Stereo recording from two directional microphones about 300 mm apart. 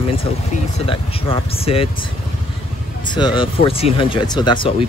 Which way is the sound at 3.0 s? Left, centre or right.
Centre.